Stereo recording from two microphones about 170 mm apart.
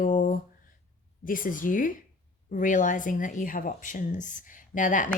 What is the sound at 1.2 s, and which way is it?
Speech, 55° left (ahead or behind).